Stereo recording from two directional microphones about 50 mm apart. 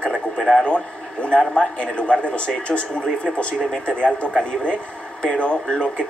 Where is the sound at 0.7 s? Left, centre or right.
Left.